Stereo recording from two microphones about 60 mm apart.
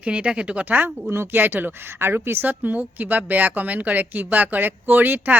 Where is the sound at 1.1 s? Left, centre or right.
Right.